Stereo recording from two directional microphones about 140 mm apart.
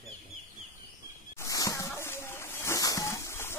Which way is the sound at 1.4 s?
25° left (ahead or behind).